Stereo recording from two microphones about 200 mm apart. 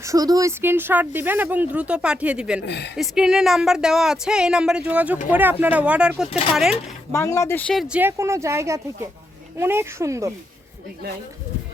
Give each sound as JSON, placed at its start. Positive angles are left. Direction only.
{"t": 0.0, "sound": "speech", "side_deg": -15}
{"t": 2.6, "sound": "speech", "side_deg": 55}
{"t": 2.9, "sound": "speech", "side_deg": -5}
{"t": 7.1, "sound": "speech", "side_deg": 15}